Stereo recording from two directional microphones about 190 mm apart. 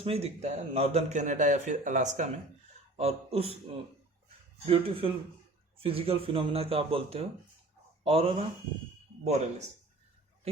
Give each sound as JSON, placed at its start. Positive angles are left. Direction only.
{"t": 0.0, "sound": "a man's voice", "side_deg": -30}
{"t": 4.6, "sound": "a man's voice", "side_deg": -30}